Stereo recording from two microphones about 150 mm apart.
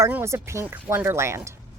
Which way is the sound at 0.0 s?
15° right (ahead or behind).